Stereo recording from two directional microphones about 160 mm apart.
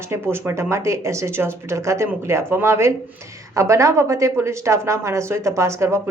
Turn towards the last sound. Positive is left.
turn(degrees=-15)  # may be behind; listen again after turning